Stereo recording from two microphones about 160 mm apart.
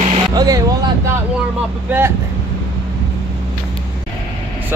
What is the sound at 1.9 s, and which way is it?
Speech, 15° right (ahead or behind).